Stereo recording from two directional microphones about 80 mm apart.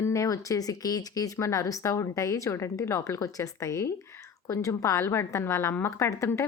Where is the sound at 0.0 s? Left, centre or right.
Left.